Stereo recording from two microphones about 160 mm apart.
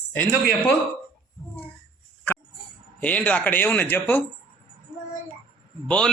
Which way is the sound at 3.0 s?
10° left (ahead or behind).